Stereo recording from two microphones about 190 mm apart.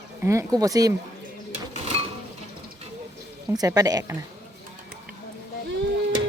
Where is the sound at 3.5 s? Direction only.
20° right (ahead or behind).